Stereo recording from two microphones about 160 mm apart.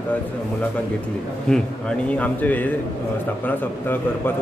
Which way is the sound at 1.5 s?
5° left (ahead or behind).